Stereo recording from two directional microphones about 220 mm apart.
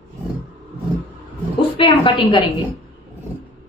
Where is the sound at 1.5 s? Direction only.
25° left (ahead or behind).